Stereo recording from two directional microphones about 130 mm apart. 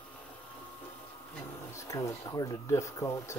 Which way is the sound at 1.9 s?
25° left (ahead or behind).